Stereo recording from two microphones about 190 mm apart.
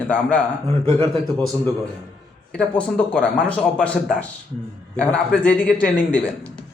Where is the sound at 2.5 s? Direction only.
5° left (ahead or behind).